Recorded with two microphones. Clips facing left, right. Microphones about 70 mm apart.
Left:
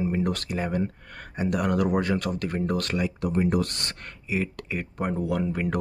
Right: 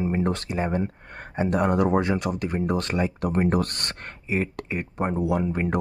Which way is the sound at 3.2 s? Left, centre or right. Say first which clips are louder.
Right 1 dB; right.